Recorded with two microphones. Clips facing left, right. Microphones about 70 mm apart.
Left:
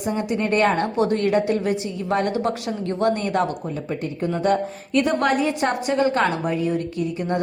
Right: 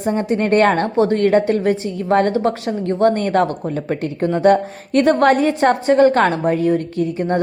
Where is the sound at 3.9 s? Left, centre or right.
Right.